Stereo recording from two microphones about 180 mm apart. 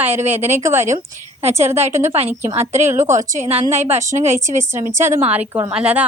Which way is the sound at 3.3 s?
40° right (ahead or behind).